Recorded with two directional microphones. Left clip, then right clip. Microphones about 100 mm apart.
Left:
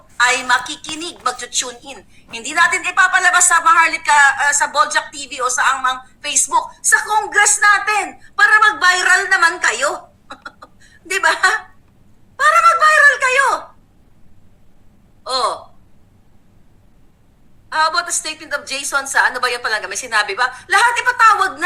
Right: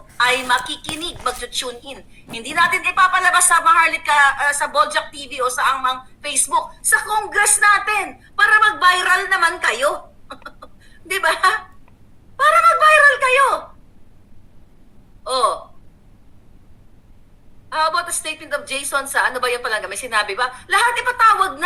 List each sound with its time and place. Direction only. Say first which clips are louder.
0.2 s speech: left 2 dB; 25° left (ahead or behind)
12.4 s a sound: left 1 dB; 25° left (ahead or behind)
15.2 s speech: right 1 dB; 25° left (ahead or behind)
17.7 s speech: left 3 dB; 25° left (ahead or behind)